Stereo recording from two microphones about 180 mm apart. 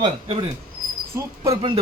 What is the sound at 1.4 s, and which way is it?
Speech, 30° right (ahead or behind).